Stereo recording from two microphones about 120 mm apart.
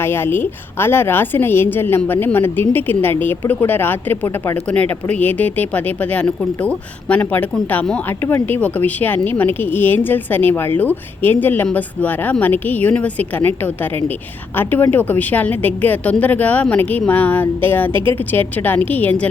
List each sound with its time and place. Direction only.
0.0 s a woman's voice: 20° left (ahead or behind)
14.5 s a woman's voice: 15° left (ahead or behind)